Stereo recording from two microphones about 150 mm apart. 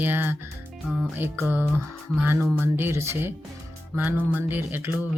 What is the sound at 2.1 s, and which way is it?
Speech, 15° right (ahead or behind).